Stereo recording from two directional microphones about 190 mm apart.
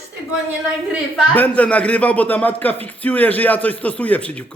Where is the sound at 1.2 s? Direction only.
10° left (ahead or behind).